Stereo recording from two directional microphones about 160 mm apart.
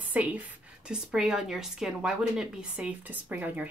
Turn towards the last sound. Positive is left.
turn(degrees=-10)  # may be behind; listen again after turning